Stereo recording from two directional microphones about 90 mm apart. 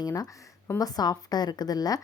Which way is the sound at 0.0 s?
45° left (ahead or behind).